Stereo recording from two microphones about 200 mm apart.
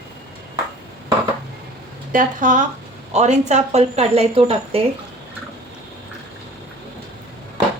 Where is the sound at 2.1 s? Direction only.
40° right (ahead or behind).